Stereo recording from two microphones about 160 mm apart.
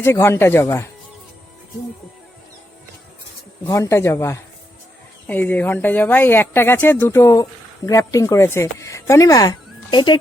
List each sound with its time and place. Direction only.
0.0 s speech: 15° left (ahead or behind)
3.7 s speech: 20° left (ahead or behind)